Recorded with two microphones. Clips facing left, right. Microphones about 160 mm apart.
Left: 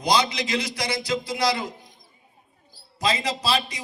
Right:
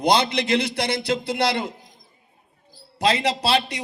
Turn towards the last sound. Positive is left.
turn(degrees=-65)  # may be behind; listen again after turning